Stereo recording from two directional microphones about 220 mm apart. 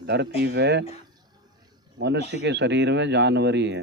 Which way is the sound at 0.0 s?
50° right (ahead or behind).